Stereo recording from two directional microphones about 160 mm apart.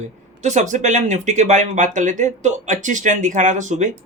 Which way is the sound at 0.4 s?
50° right (ahead or behind).